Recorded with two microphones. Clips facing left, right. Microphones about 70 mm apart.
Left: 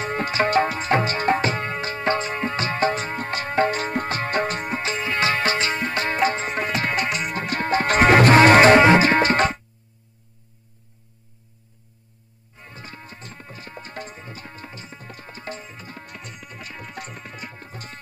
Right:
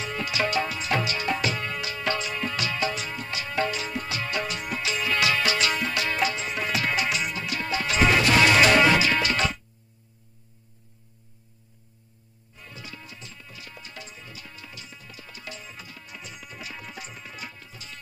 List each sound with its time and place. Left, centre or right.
0.0 s music: left
12.5 s music: left